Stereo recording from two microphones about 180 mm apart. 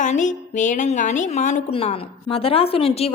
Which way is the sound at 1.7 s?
30° left (ahead or behind).